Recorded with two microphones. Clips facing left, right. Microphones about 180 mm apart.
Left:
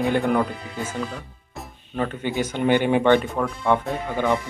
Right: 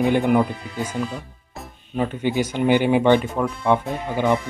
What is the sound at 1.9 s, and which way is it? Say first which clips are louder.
Speech: right 3 dB; 10° right (ahead or behind).